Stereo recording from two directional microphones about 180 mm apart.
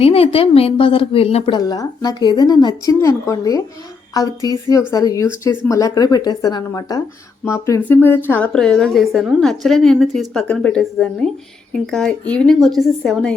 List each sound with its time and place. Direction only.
0.0 s a woman's voice: 35° left (ahead or behind)
1.5 s a woman's voice: 20° left (ahead or behind); by 13.3 s 5° left (ahead or behind)